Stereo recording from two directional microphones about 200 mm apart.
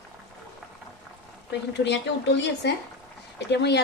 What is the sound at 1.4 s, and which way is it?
Speech, 60° left (ahead or behind).